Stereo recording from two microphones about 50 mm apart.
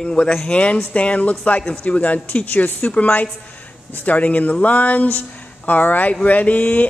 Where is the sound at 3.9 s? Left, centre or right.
Left.